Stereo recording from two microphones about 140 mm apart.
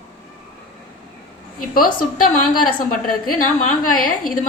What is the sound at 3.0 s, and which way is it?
A woman's voice, 85° left.